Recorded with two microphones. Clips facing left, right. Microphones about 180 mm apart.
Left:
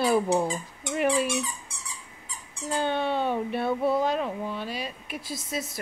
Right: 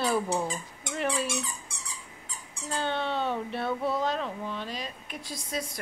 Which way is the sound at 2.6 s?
15° left (ahead or behind).